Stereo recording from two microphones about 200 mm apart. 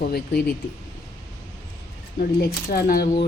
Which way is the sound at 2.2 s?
50° left (ahead or behind).